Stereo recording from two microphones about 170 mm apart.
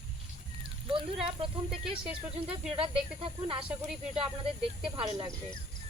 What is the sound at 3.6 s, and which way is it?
Speech, 5° right (ahead or behind).